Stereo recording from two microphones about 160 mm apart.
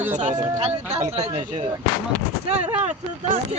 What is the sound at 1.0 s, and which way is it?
Speech, 40° right (ahead or behind).